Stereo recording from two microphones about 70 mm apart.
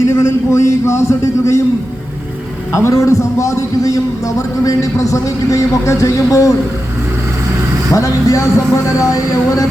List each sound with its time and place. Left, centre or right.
0.1 s a man's voice: left
2.7 s a man's voice: left
7.9 s a man's voice: left